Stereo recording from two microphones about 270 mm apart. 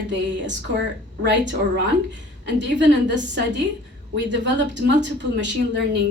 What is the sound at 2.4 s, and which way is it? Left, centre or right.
Speech, right.